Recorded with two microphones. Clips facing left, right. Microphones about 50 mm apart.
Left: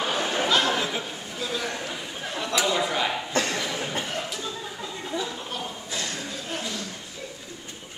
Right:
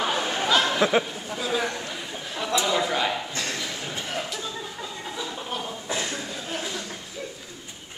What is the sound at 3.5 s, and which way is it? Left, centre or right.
Cough, centre.